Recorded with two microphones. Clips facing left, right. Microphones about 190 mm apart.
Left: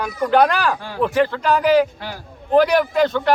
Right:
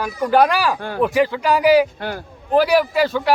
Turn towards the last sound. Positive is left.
turn(degrees=-5)  # may be behind; listen again after turning